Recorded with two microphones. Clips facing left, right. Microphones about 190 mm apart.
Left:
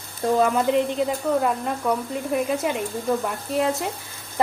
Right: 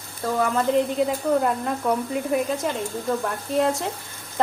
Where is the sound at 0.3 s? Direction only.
20° left (ahead or behind).